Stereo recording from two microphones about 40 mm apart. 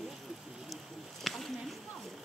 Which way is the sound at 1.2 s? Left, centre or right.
Centre.